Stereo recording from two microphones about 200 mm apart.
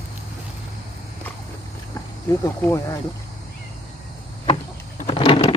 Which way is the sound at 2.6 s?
15° left (ahead or behind).